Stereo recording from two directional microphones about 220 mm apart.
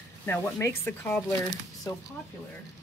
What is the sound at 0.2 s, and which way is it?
A woman's voice, 10° left (ahead or behind).